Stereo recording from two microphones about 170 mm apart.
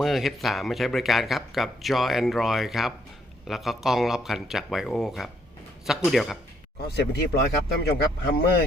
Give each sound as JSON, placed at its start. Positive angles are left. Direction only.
{"t": 0.0, "sound": "speech", "side_deg": 0}
{"t": 6.8, "sound": "speech", "side_deg": 70}